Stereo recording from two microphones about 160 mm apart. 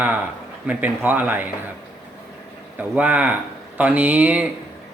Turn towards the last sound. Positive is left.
turn(degrees=-10)  # may be behind; listen again after turning